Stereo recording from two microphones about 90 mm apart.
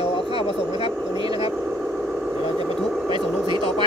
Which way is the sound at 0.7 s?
60° right (ahead or behind).